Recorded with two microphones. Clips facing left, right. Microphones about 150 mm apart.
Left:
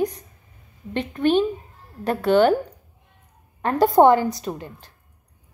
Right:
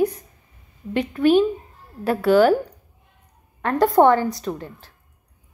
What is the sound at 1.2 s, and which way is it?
A woman's voice, 5° right (ahead or behind).